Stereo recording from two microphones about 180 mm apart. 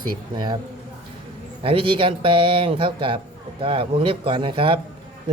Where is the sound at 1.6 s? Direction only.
30° right (ahead or behind).